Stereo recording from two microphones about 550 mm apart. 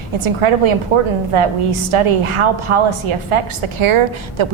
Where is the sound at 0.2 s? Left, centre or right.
Right.